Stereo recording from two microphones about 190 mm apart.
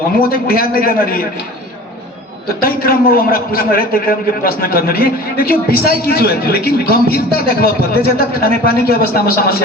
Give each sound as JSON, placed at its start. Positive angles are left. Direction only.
{"t": 0.2, "sound": "a man's voice", "side_deg": 50}
{"t": 2.6, "sound": "a man's voice", "side_deg": 50}